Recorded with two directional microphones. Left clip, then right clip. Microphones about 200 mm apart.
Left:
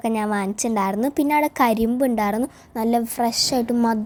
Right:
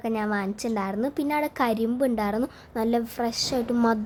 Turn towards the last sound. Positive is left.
turn(degrees=15)  # may be behind; listen again after turning